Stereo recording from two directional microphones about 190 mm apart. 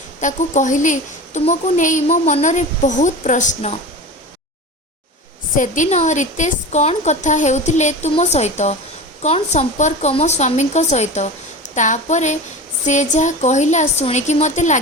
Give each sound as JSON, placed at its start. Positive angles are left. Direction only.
{"t": 0.2, "sound": "a woman's voice", "side_deg": 40}
{"t": 5.5, "sound": "a woman's voice", "side_deg": 40}